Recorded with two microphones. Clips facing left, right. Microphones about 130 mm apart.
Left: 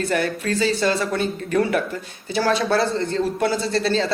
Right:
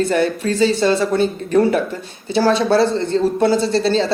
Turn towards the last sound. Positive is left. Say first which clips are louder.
# right 5 dB
turn(degrees=-30)  # may be behind; listen again after turning